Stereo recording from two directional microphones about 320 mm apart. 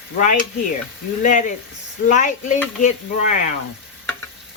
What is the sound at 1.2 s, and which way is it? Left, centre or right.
Speech, left.